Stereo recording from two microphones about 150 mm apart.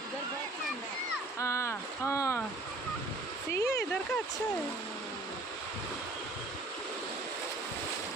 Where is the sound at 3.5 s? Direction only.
20° left (ahead or behind).